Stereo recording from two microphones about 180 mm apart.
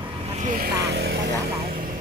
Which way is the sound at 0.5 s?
55° right (ahead or behind).